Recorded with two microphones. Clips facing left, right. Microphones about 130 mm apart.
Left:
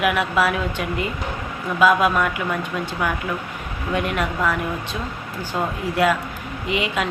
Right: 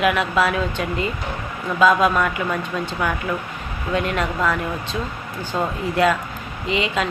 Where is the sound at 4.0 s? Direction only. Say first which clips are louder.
Right 1 dB; 15° left (ahead or behind).